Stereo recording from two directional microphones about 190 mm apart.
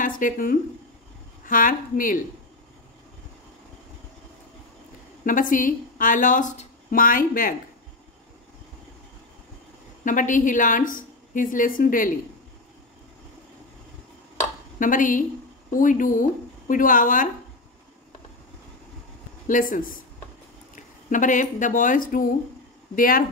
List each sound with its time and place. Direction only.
0.0 s speech: 45° left (ahead or behind)
5.2 s speech: 45° left (ahead or behind)
10.0 s speech: 45° left (ahead or behind)
14.3 s a sound: 45° left (ahead or behind)
15.7 s speech: 45° left (ahead or behind)
19.4 s speech: 45° left (ahead or behind)